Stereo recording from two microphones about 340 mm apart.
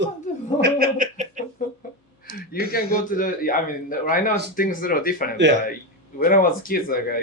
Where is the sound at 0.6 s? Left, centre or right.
Right.